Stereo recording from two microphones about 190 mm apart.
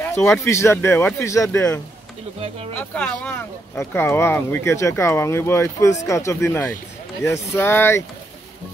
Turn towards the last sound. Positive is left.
turn(degrees=10)  # may be behind; listen again after turning